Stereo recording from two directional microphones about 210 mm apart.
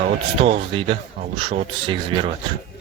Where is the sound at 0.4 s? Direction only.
25° right (ahead or behind).